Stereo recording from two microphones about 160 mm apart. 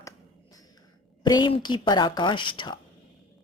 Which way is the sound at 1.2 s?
30° left (ahead or behind).